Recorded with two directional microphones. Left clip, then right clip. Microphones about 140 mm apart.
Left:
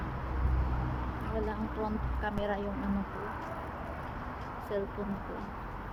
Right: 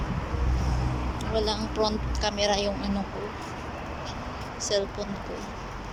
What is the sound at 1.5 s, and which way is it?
Speech, 5° left (ahead or behind).